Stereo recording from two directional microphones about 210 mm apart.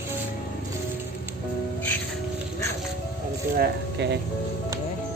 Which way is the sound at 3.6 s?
55° right (ahead or behind).